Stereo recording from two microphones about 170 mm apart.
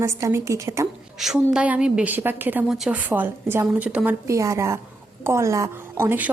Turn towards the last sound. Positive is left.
turn(degrees=-10)  # may be behind; listen again after turning